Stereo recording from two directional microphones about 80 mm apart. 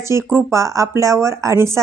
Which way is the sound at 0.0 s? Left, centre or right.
Right.